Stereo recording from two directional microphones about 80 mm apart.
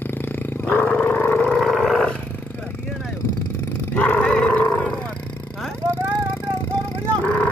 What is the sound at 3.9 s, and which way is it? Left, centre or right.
Dog, centre.